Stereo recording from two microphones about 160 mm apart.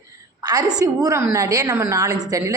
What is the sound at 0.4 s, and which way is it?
A woman's voice, 25° right (ahead or behind).